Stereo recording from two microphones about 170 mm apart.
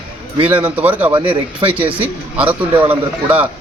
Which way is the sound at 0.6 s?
10° right (ahead or behind).